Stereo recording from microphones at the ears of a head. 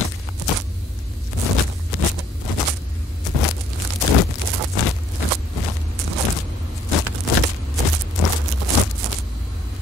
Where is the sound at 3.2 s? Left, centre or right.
Left.